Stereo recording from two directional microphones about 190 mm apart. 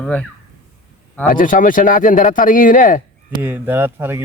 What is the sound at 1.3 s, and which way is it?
Speech, 45° left (ahead or behind).